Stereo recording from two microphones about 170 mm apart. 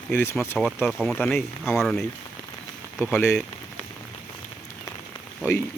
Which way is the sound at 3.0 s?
10° left (ahead or behind).